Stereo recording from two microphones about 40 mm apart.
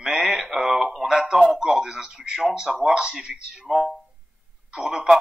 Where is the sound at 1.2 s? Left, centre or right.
Right.